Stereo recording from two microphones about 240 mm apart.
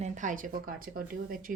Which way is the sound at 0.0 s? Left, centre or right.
Right.